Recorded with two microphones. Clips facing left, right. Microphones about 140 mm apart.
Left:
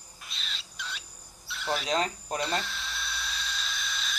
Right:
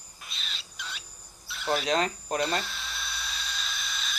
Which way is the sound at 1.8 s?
65° right (ahead or behind).